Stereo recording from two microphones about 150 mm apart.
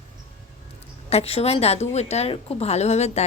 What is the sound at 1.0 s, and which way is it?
A woman's voice, 40° left (ahead or behind).